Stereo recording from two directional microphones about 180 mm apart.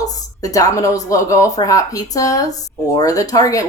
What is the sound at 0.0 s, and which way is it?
Speech, 20° left (ahead or behind).